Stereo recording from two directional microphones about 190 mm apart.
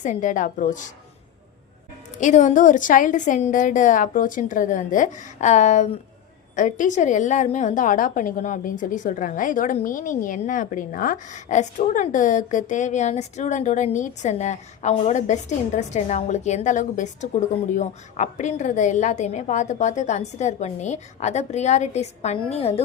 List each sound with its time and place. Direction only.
0.0 s a woman's voice: 40° left (ahead or behind)
2.2 s a woman's voice: 40° left (ahead or behind)